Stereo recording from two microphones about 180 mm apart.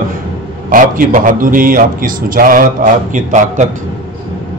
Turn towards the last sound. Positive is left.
turn(degrees=-45)  # may be behind; listen again after turning